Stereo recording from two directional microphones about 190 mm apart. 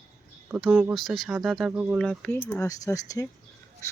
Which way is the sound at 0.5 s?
5° right (ahead or behind).